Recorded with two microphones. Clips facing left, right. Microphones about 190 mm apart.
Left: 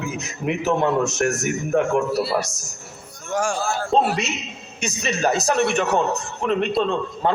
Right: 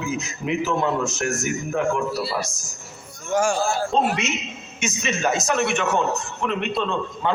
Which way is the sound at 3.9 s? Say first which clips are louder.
Left 2 dB; 35° left (ahead or behind).